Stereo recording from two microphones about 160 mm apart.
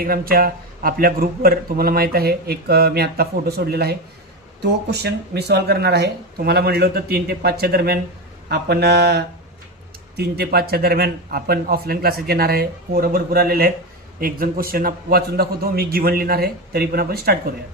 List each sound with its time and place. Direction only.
0.0 s a man's voice: 70° right (ahead or behind)
4.6 s speech: 90° right; by 7.9 s 75° right (ahead or behind)
8.4 s a man's voice: 90° right; by 17.5 s 75° right (ahead or behind)